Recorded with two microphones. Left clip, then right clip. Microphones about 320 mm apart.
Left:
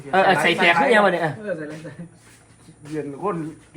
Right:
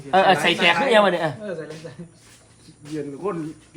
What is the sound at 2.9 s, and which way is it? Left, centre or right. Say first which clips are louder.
Speech: left 2 dB; centre.